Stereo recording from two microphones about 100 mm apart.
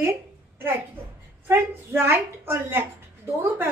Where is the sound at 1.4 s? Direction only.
25° right (ahead or behind).